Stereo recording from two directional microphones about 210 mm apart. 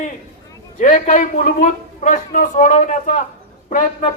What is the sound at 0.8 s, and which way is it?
Speech, 40° left (ahead or behind).